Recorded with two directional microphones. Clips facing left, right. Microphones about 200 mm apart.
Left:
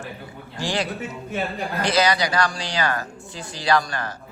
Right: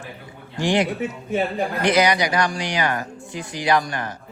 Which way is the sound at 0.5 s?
20° right (ahead or behind).